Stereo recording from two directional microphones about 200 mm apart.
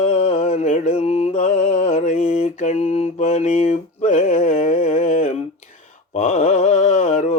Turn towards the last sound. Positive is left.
turn(degrees=35)  # may be behind; listen again after turning